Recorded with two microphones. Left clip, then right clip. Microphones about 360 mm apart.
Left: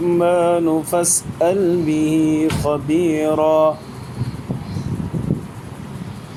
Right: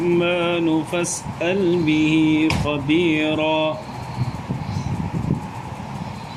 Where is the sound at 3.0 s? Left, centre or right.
Centre.